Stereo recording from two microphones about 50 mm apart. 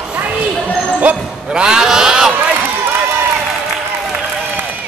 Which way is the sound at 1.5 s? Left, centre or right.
Centre.